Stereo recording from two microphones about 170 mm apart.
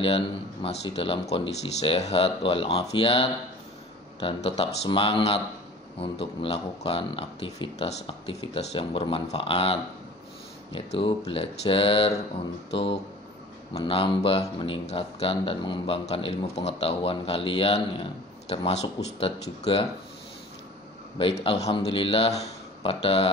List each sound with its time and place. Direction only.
0.0 s speech: 35° left (ahead or behind)
13.8 s speech: 35° left (ahead or behind)
21.2 s speech: 35° left (ahead or behind)